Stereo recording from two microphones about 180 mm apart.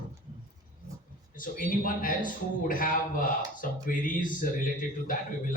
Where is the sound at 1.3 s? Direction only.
50° left (ahead or behind).